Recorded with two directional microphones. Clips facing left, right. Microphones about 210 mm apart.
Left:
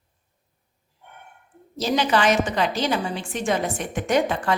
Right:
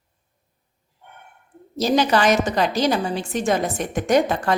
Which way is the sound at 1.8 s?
40° right (ahead or behind).